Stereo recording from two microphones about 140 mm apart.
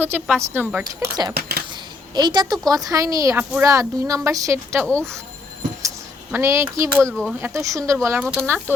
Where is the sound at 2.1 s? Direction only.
30° right (ahead or behind).